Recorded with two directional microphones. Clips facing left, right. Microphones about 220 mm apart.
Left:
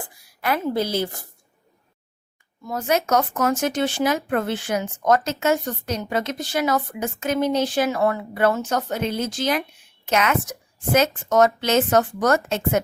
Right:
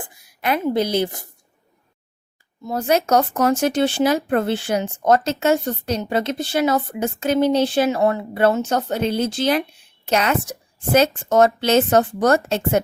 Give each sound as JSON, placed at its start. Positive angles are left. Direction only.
{"t": 0.0, "sound": "a woman's voice", "side_deg": -20}
{"t": 2.6, "sound": "speech", "side_deg": -30}